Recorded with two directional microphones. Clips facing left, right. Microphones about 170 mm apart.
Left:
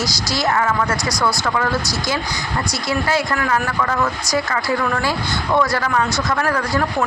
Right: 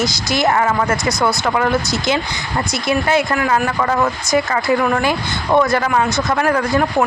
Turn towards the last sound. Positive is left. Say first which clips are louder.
# right 4 dB
turn(degrees=-20)  # may be behind; listen again after turning